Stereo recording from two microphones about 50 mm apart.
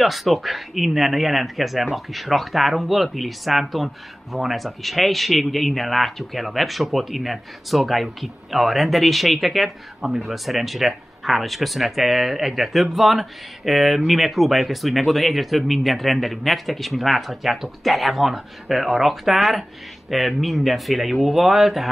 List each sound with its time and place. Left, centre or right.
0.0 s speech: centre